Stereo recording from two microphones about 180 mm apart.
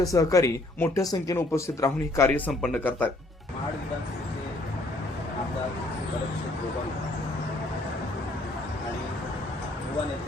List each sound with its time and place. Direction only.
0.0 s speech: 20° left (ahead or behind)
2.5 s speech: centre (ahead or behind)